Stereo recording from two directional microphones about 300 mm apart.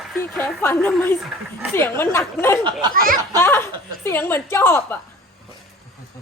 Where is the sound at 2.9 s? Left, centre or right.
Right.